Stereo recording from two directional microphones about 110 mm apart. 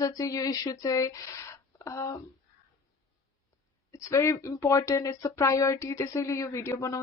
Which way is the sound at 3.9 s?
25° left (ahead or behind).